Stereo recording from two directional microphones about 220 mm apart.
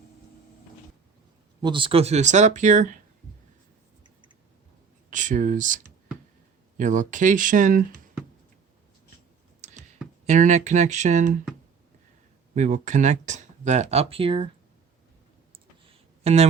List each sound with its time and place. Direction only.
1.6 s speech: 20° right (ahead or behind)
5.1 s speech: 35° right (ahead or behind)
10.2 s speech: 35° right (ahead or behind)
12.5 s speech: 35° right (ahead or behind)
15.5 s a sound: 25° right (ahead or behind)